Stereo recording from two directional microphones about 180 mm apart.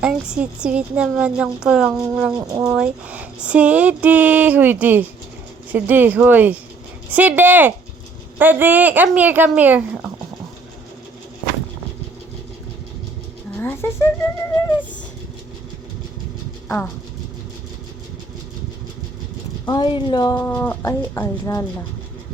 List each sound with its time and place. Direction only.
0.0 s a woman's voice: 5° right (ahead or behind)
13.6 s a sound: 10° left (ahead or behind)
16.6 s speech: 10° left (ahead or behind)
19.6 s speech: 25° left (ahead or behind)
20.5 s speech: 10° left (ahead or behind)